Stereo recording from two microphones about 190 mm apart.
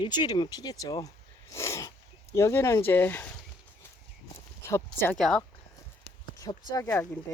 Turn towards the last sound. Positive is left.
turn(degrees=15)  # may be behind; listen again after turning